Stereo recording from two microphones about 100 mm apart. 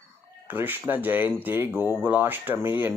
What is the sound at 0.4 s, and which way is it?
Speech, 20° right (ahead or behind).